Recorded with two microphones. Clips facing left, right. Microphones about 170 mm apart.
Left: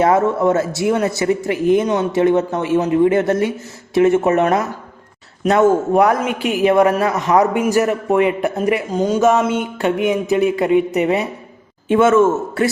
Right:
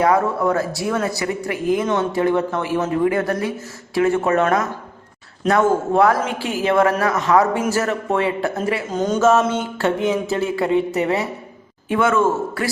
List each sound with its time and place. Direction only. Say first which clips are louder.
0.0 s a man's voice: left 3 dB; 25° left (ahead or behind)